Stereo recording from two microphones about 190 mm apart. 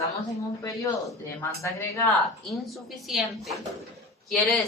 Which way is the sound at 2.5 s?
Centre (ahead or behind).